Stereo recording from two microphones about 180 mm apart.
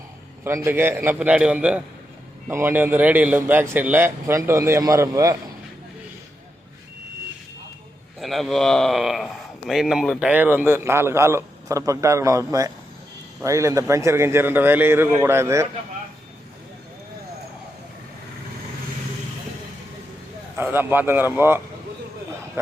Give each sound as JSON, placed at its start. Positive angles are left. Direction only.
{"t": 0.4, "sound": "a man's voice", "side_deg": -10}
{"t": 8.2, "sound": "a man's voice", "side_deg": 0}
{"t": 20.6, "sound": "a man's voice", "side_deg": -10}